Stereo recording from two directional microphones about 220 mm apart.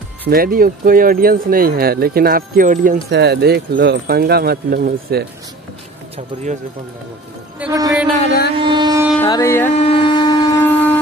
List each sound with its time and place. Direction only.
0.3 s speech: 40° right (ahead or behind)
6.1 s speech: 35° right (ahead or behind)
7.5 s speech: 10° right (ahead or behind)
8.6 s carnatic music: 20° right (ahead or behind)
9.2 s music: 15° left (ahead or behind)
9.8 s shofar: 25° left (ahead or behind); by 10.9 s 10° left (ahead or behind)